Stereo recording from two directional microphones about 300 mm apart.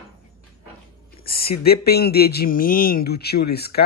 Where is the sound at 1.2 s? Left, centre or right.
Left.